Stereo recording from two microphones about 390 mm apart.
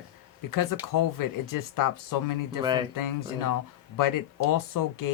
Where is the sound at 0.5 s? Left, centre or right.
Left.